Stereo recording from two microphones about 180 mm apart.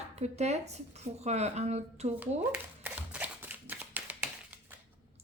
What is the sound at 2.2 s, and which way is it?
Shuffling cards, 10° right (ahead or behind).